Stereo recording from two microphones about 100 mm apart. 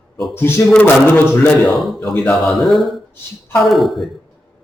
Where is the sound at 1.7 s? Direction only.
Centre (ahead or behind).